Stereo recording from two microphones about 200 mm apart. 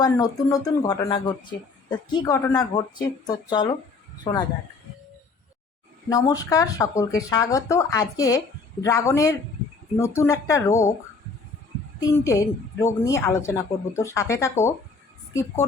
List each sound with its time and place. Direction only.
0.0 s a woman's voice: 20° left (ahead or behind)
6.1 s a woman's voice: 15° left (ahead or behind)
11.9 s a woman's voice: 15° left (ahead or behind)